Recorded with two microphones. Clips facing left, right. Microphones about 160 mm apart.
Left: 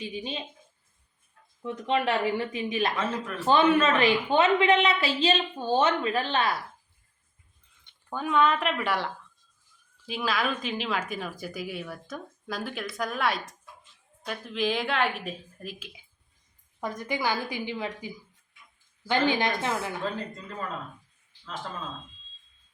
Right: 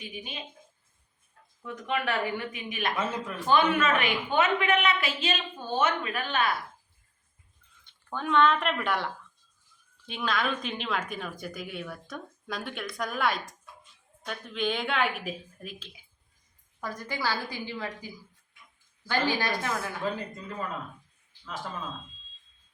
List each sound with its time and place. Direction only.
0.0 s a woman's voice: 30° left (ahead or behind)
1.6 s a woman's voice: 25° left (ahead or behind)
2.9 s speech: 10° right (ahead or behind)
3.4 s a woman's voice: 30° left (ahead or behind)
8.1 s a woman's voice: 5° left (ahead or behind)
16.8 s a woman's voice: 20° left (ahead or behind)
20.0 s speech: 10° right (ahead or behind)